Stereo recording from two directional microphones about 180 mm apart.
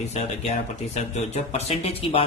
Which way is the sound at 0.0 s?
40° left (ahead or behind).